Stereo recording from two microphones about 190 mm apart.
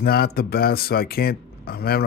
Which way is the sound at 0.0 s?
55° left (ahead or behind).